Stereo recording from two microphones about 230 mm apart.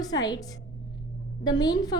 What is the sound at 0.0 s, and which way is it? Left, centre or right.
A woman's voice, centre.